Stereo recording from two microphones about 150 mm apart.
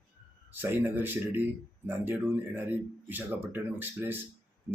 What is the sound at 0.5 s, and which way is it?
Speech, 15° right (ahead or behind).